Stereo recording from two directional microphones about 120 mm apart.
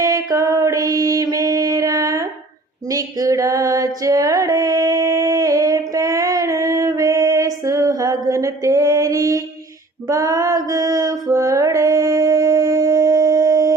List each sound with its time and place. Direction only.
0.0 s mantra: 30° right (ahead or behind)
2.9 s female singing: 30° right (ahead or behind)
10.1 s music: 30° right (ahead or behind)